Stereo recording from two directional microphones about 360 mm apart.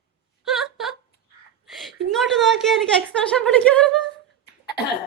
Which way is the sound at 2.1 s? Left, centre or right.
Centre.